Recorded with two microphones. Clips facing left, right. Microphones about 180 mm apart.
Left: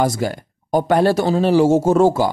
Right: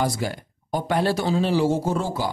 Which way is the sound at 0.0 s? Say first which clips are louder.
Left 6 dB; 45° left (ahead or behind).